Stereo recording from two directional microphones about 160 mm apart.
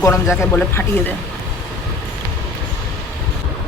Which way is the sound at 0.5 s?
15° left (ahead or behind).